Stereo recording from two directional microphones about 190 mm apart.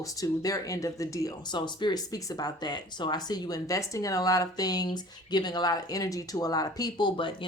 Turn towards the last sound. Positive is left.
turn(degrees=25)  # may be behind; listen again after turning